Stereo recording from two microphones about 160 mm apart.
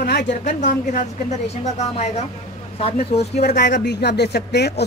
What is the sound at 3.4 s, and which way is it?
A woman's voice, 90° left.